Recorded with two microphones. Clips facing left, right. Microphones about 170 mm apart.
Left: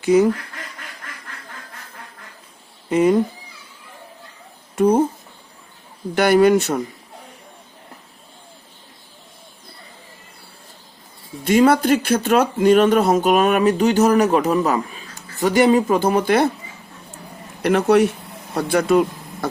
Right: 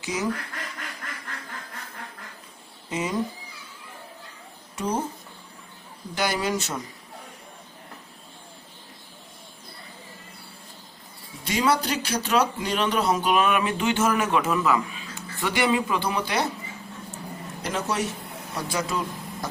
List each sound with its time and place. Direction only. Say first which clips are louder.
0.0 s speech: left 15 dB; 55° left (ahead or behind)
2.9 s speech: left 13 dB; 55° left (ahead or behind)
4.7 s speech: left 12 dB; 55° left (ahead or behind)
6.1 s speech: left 13 dB; 60° left (ahead or behind)
11.4 s speech: left 10 dB; 50° left (ahead or behind)
17.6 s speech: left 13 dB; 65° left (ahead or behind)